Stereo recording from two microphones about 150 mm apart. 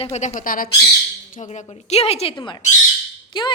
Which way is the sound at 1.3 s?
55° left (ahead or behind).